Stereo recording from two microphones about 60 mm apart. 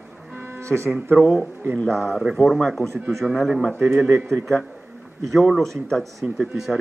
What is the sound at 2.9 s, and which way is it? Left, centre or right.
Speech, right.